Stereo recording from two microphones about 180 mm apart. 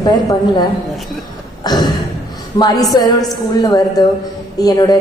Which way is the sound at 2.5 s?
20° left (ahead or behind).